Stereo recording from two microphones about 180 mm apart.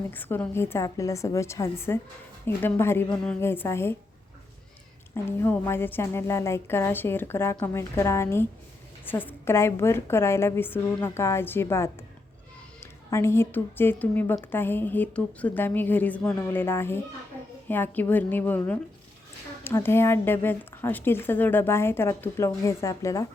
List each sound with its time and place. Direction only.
0.1 s speech: 10° left (ahead or behind)
5.1 s a woman's voice: 15° left (ahead or behind)